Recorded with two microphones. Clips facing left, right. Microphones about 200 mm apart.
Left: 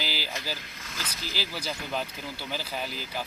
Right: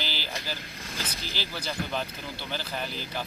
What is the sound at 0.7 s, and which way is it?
Speech, 35° right (ahead or behind).